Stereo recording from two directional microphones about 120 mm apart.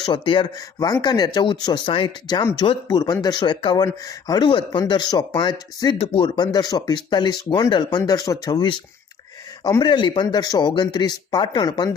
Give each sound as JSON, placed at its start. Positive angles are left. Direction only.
{"t": 0.0, "sound": "speech", "side_deg": 40}
{"t": 3.8, "sound": "speech", "side_deg": 30}